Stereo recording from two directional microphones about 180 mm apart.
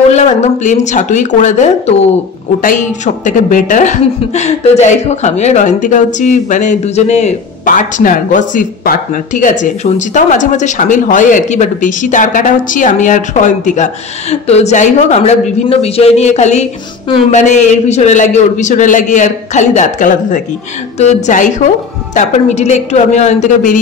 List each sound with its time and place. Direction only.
0.1 s a man's voice: 40° left (ahead or behind)
3.3 s a woman's voice: 45° left (ahead or behind)